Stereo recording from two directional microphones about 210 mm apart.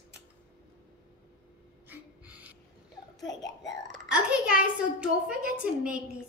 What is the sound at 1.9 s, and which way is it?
Gasp, 5° right (ahead or behind).